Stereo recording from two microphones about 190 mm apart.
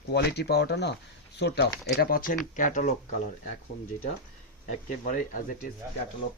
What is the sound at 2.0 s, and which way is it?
Speech, 50° left (ahead or behind).